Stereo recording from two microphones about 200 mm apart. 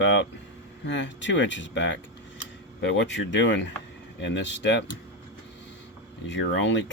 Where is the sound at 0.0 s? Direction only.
65° left (ahead or behind).